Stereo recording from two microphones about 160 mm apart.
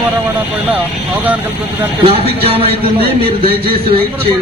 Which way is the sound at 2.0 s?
40° right (ahead or behind).